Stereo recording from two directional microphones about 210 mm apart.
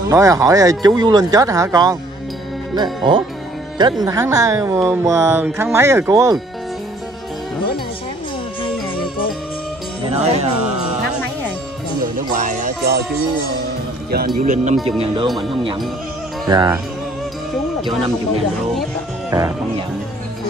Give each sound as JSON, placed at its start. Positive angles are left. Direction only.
{"t": 0.1, "sound": "speech", "side_deg": -15}
{"t": 10.0, "sound": "speech", "side_deg": -30}
{"t": 12.2, "sound": "music", "side_deg": -40}
{"t": 14.1, "sound": "speech", "side_deg": -45}
{"t": 15.2, "sound": "speech", "side_deg": 0}
{"t": 16.4, "sound": "speech", "side_deg": -20}